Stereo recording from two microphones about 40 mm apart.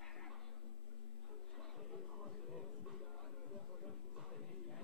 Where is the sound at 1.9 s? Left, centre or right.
Centre.